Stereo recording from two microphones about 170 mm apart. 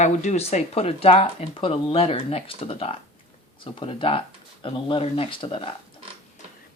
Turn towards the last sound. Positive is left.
turn(degrees=30)  # may be behind; listen again after turning